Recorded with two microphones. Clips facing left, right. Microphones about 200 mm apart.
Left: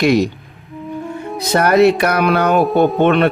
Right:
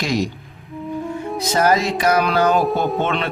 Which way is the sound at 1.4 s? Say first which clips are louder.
Left 6 dB; 65° left (ahead or behind).